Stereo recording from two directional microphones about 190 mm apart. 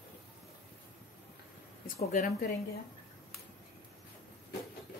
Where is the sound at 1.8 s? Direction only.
45° left (ahead or behind).